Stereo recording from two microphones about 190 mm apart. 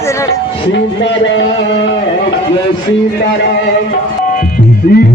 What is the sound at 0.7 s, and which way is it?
Speech, 70° left (ahead or behind).